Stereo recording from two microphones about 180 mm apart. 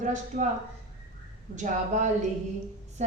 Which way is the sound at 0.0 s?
45° right (ahead or behind).